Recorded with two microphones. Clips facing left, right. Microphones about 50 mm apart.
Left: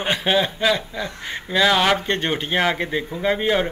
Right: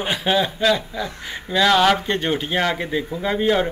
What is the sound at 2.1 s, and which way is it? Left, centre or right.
A man's voice, left.